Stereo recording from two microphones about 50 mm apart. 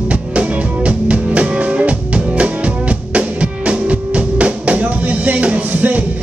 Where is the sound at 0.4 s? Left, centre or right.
Right.